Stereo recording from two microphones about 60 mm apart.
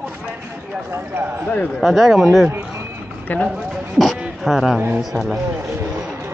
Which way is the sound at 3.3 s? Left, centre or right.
Left.